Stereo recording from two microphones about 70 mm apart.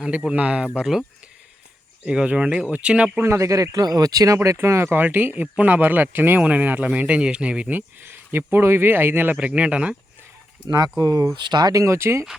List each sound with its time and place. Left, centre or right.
0.0 s speech: centre
0.8 s speech: centre
2.0 s speech: centre
3.2 s speech: right
3.8 s speech: right
4.4 s speech: right; by 7.8 s centre
7.8 s speech: right
9.4 s speech: centre
10.7 s speech: right
11.3 s speech: right
11.7 s speech: right